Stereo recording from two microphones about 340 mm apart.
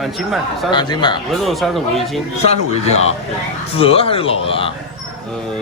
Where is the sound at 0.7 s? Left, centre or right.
Centre.